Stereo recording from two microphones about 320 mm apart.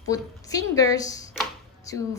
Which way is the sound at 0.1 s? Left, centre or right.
Centre.